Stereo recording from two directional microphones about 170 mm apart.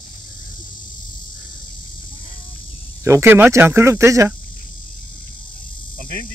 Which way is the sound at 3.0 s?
15° right (ahead or behind).